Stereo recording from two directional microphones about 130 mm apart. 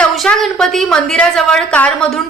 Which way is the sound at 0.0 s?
5° left (ahead or behind).